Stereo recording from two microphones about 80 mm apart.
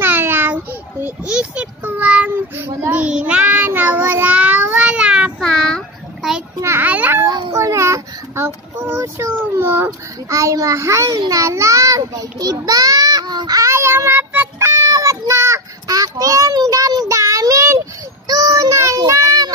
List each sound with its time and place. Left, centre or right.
0.0 s a sound: right
2.6 s a child's voice: right
3.0 s child singing: centre
5.4 s child singing: centre
6.8 s a child's voice: right
7.5 s a sound: right
8.7 s a child's voice: right
9.8 s a child's voice: right
13.6 s child singing: right
14.6 s a sound: right
15.9 s child singing: right
17.1 s child singing: right
18.2 s child singing: right